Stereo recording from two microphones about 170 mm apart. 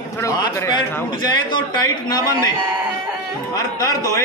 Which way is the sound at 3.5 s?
20° left (ahead or behind).